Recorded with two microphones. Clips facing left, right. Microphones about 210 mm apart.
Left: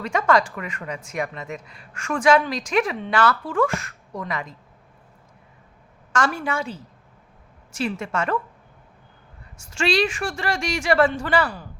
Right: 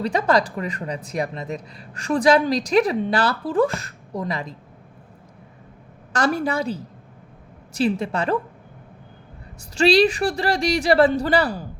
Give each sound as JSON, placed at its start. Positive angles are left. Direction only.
{"t": 0.0, "sound": "speech", "side_deg": -35}
{"t": 6.1, "sound": "speech", "side_deg": -35}
{"t": 9.6, "sound": "speech", "side_deg": -35}